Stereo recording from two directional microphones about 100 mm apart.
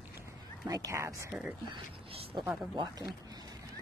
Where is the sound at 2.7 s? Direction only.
40° right (ahead or behind).